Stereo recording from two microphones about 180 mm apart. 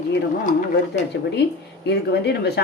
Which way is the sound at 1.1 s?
75° left (ahead or behind).